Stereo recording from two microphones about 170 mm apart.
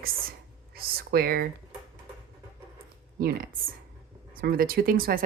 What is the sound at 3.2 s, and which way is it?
Speech, 60° right (ahead or behind).